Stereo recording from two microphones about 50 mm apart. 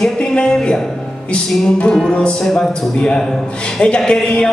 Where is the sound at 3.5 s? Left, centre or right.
Centre.